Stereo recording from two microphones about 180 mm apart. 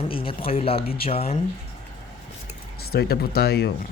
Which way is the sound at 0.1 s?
30° left (ahead or behind).